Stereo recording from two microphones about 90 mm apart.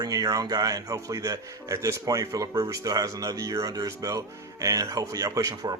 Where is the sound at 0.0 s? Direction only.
40° right (ahead or behind).